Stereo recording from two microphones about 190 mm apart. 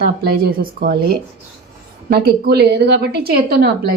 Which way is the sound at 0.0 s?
55° right (ahead or behind).